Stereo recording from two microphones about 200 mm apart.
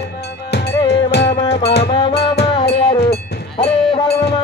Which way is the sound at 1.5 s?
55° left (ahead or behind).